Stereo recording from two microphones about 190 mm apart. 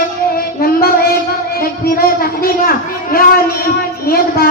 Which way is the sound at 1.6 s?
50° left (ahead or behind).